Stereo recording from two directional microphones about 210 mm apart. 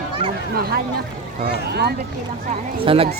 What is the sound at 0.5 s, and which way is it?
Speech, 45° right (ahead or behind).